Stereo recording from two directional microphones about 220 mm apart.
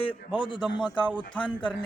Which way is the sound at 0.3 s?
20° left (ahead or behind).